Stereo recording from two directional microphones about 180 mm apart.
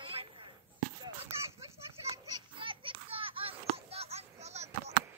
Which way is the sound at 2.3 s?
30° right (ahead or behind).